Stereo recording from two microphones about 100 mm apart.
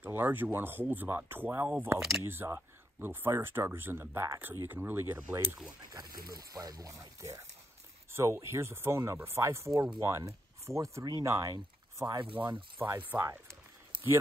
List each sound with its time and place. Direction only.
0.0 s speech: 20° right (ahead or behind)
2.0 s speech: centre (ahead or behind)
2.2 s speech: 25° right (ahead or behind)
5.9 s speech: 40° right (ahead or behind)
12.7 s speech: 20° right (ahead or behind)